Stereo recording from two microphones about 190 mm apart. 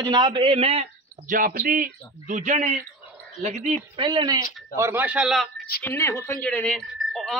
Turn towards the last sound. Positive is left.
turn(degrees=0)  # may be behind; listen again after turning